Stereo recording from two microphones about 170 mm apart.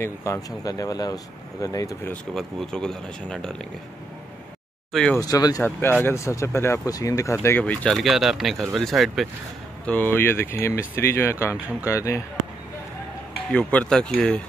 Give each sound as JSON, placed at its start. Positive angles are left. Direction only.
{"t": 0.0, "sound": "speech", "side_deg": 15}
{"t": 2.3, "sound": "speech", "side_deg": 5}
{"t": 4.9, "sound": "speech", "side_deg": 5}
{"t": 5.2, "sound": "speech", "side_deg": 20}
{"t": 9.8, "sound": "speech", "side_deg": 10}
{"t": 13.5, "sound": "speech", "side_deg": 5}